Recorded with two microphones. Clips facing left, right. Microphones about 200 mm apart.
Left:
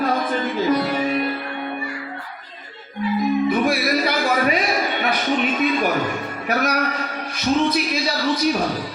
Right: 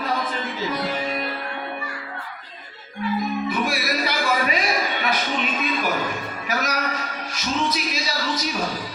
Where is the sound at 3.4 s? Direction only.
50° left (ahead or behind).